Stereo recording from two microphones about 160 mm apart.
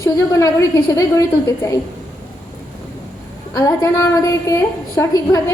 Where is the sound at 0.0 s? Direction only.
20° left (ahead or behind).